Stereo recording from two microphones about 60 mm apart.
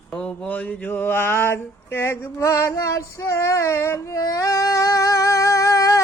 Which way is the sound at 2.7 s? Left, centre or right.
Left.